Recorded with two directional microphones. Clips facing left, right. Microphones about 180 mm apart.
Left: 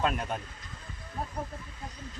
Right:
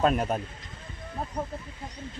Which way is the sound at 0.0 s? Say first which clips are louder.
Right 6 dB; 40° right (ahead or behind).